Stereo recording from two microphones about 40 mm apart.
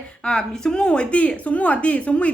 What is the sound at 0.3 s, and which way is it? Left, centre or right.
A woman's voice, centre.